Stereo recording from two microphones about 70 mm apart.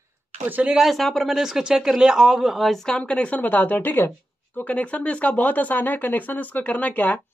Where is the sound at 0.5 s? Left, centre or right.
Right.